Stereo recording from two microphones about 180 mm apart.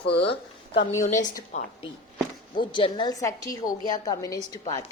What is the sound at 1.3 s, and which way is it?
Speech, 45° left (ahead or behind).